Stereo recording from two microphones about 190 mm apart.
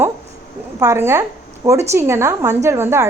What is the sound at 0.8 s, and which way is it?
A woman's voice, 15° right (ahead or behind).